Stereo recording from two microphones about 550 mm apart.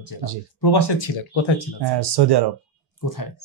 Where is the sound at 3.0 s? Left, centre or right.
Left.